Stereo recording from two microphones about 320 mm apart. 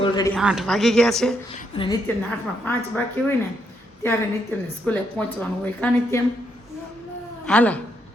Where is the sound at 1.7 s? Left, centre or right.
Centre.